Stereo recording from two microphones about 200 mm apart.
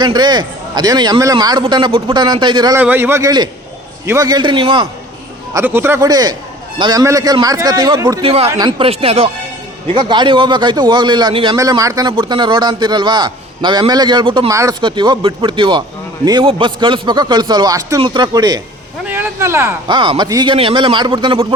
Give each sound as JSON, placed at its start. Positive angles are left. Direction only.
{"t": 0.0, "sound": "a man's voice", "side_deg": -20}
{"t": 2.7, "sound": "a man's voice", "side_deg": -10}
{"t": 5.5, "sound": "a man's voice", "side_deg": -10}
{"t": 19.0, "sound": "speech", "side_deg": -10}
{"t": 20.0, "sound": "a man's voice", "side_deg": -25}